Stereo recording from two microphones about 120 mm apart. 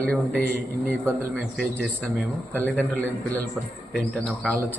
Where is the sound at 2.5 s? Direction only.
15° left (ahead or behind).